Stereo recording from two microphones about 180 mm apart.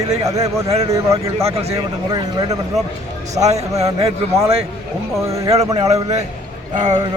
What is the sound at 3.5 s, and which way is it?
Speech, 35° right (ahead or behind).